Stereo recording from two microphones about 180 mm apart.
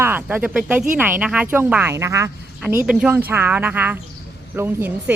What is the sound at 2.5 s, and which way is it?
Speech, 5° right (ahead or behind).